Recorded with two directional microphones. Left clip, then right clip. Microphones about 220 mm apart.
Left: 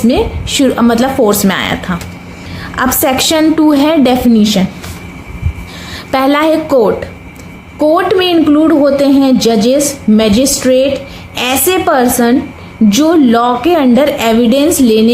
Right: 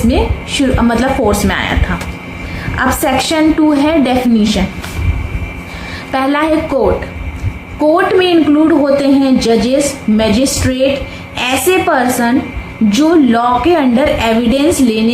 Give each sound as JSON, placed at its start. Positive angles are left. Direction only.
{"t": 0.1, "sound": "a woman's voice", "side_deg": 50}
{"t": 2.7, "sound": "a woman's voice", "side_deg": 50}
{"t": 6.1, "sound": "a woman's voice", "side_deg": 50}